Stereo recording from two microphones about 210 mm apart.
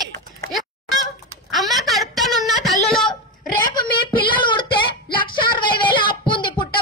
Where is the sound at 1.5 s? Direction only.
Centre (ahead or behind).